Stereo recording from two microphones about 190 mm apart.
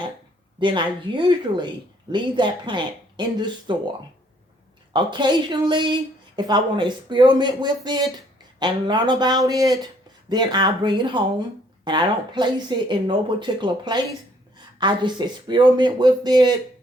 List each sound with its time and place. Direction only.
0.6 s speech: 25° right (ahead or behind)
4.9 s speech: 25° right (ahead or behind)